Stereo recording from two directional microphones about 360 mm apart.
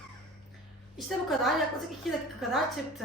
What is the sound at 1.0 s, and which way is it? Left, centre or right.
A woman's voice, centre.